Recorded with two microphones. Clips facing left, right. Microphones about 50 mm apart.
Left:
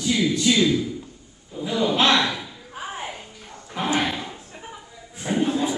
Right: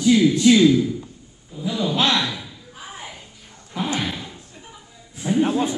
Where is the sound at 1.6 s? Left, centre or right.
Left.